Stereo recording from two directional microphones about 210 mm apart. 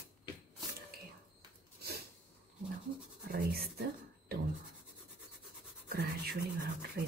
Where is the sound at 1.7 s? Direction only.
50° right (ahead or behind).